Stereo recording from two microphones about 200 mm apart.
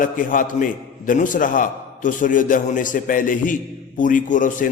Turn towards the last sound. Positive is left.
turn(degrees=40)  # may be behind; listen again after turning